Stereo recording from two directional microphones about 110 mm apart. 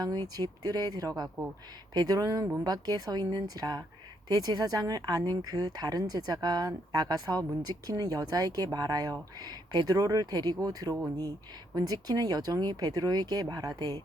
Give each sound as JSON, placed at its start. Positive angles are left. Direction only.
{"t": 0.0, "sound": "speech", "side_deg": -35}